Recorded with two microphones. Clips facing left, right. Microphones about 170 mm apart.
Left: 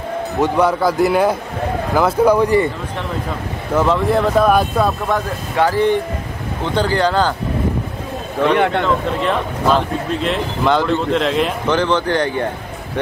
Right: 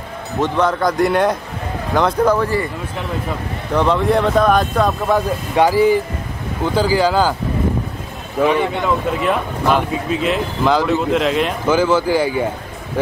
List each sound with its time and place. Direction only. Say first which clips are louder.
0.4 s speech: left 1 dB; 10° left (ahead or behind)
2.3 s a man's voice: left 4 dB; 20° left (ahead or behind)
3.7 s speech: even; centre (ahead or behind)
5.1 s speech: right 3 dB; 10° right (ahead or behind)
8.5 s speech: left 3 dB; 65° left (ahead or behind)
8.8 s speech: even; 10° right (ahead or behind)